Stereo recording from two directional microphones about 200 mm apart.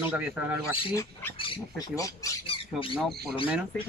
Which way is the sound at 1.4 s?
20° left (ahead or behind).